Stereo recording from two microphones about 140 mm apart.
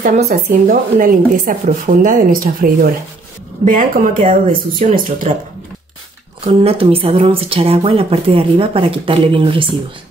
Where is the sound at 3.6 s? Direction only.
75° right (ahead or behind).